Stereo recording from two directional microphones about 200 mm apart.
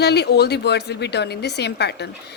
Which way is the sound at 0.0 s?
55° left (ahead or behind).